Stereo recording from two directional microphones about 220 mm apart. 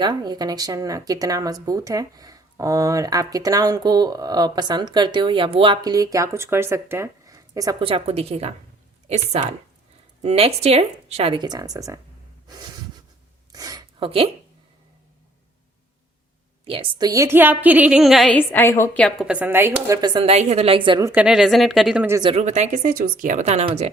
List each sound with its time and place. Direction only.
0.0 s speech: 20° right (ahead or behind)
13.5 s a sound: 15° right (ahead or behind)
16.6 s speech: 25° right (ahead or behind)
21.1 s speech: 5° right (ahead or behind)
22.2 s speech: 25° right (ahead or behind)